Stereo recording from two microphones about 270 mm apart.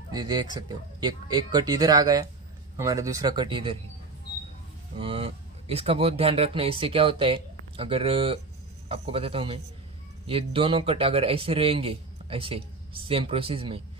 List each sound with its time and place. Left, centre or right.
0.1 s speech: centre
4.9 s a man's voice: centre